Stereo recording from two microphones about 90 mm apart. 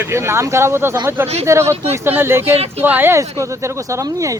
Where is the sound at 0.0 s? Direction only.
30° right (ahead or behind).